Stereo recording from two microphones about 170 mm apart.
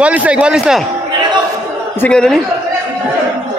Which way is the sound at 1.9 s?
5° left (ahead or behind).